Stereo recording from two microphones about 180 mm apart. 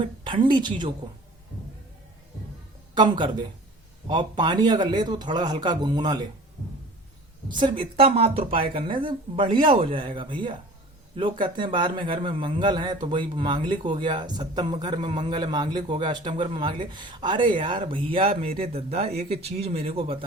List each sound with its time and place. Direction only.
0.0 s speech: 25° right (ahead or behind)
2.9 s speech: 25° right (ahead or behind)
7.4 s speech: 25° right (ahead or behind)